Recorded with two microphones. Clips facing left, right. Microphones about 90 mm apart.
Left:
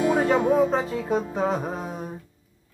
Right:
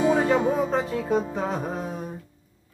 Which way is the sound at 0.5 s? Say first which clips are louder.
Left 3 dB; centre (ahead or behind).